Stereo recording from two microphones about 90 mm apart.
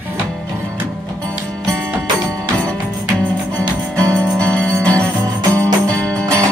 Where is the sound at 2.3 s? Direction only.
10° left (ahead or behind).